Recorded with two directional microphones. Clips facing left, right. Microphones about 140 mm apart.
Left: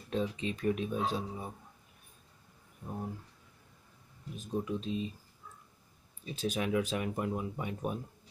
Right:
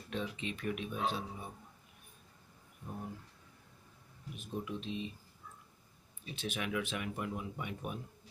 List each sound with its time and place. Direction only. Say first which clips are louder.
0.1 s speech: left 6 dB; 35° left (ahead or behind)
4.4 s speech: left 6 dB; 35° left (ahead or behind)
6.2 s speech: left 6 dB; 40° left (ahead or behind)